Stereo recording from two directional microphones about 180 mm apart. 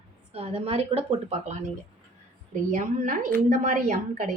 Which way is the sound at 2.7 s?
45° right (ahead or behind).